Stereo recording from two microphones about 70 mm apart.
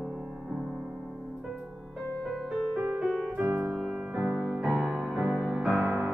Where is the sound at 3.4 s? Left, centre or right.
Right.